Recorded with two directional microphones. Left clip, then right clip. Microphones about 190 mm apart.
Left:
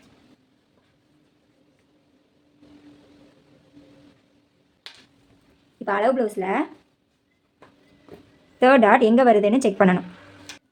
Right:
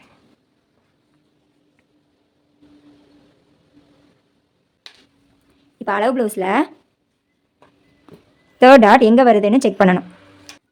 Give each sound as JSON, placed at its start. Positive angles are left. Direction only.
{"t": 5.8, "sound": "speech", "side_deg": -40}
{"t": 8.5, "sound": "a woman's voice", "side_deg": -30}